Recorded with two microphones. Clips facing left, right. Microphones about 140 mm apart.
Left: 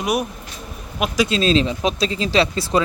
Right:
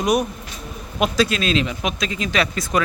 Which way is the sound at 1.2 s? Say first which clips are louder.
Left 4 dB; 30° left (ahead or behind).